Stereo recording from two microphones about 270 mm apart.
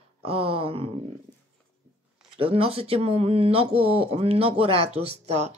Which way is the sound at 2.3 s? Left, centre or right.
Right.